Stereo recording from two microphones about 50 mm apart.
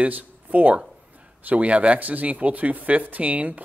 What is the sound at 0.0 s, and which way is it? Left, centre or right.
A man's voice, right.